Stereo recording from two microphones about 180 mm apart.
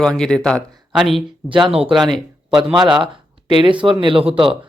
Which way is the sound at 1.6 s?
35° right (ahead or behind).